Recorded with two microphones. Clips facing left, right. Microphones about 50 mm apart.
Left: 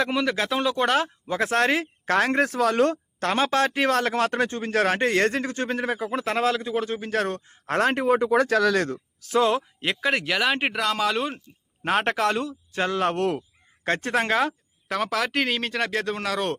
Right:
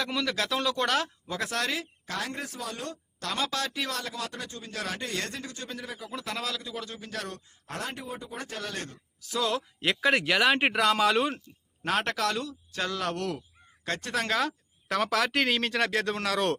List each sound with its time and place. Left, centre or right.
0.0 s speech: left
3.2 s speech: left
9.3 s speech: left
9.8 s speech: centre
11.8 s speech: left
14.8 s speech: centre